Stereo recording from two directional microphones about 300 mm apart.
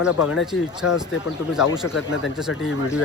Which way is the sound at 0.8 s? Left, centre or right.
Left.